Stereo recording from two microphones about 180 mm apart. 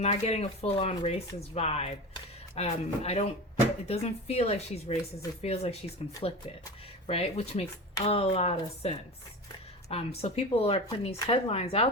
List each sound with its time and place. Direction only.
0.0 s speech: 35° left (ahead or behind)